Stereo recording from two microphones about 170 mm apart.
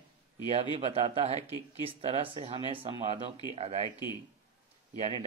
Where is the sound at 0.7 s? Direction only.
35° right (ahead or behind).